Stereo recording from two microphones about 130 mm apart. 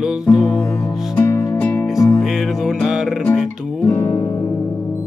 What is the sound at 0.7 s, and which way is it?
Music, 25° left (ahead or behind).